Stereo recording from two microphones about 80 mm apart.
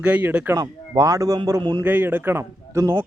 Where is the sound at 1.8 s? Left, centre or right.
Right.